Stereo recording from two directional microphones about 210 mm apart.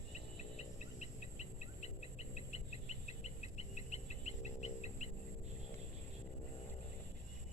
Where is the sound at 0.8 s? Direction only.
35° left (ahead or behind).